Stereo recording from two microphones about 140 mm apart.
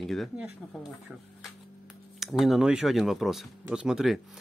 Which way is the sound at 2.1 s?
Centre (ahead or behind).